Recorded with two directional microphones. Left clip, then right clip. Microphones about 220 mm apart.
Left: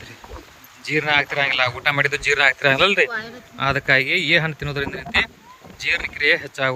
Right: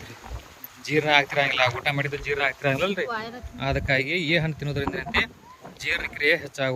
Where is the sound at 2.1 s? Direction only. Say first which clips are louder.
Left 8 dB; 30° left (ahead or behind).